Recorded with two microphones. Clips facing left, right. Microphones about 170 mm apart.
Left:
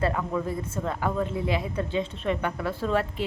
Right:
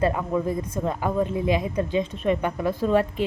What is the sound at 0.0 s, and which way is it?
Speech, 15° right (ahead or behind).